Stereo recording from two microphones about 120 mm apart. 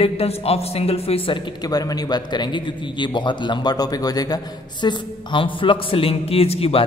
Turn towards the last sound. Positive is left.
turn(degrees=55)  # may be behind; listen again after turning